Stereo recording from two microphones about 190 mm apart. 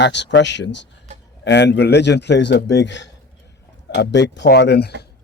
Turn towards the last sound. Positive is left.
turn(degrees=60)  # may be behind; listen again after turning